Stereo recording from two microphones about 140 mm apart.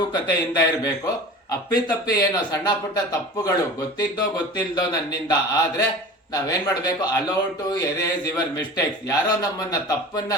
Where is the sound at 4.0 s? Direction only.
30° left (ahead or behind).